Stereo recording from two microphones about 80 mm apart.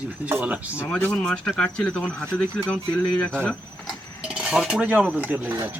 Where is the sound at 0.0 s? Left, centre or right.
Centre.